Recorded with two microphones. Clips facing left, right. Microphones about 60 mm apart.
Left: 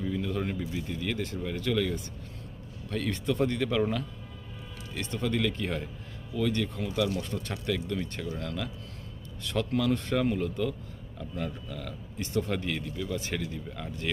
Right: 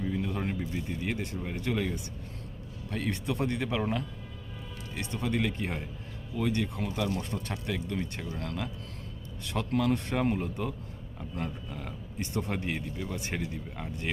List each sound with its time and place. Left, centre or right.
0.0 s vehicle: right
0.9 s a man's voice: right
9.8 s a man's voice: right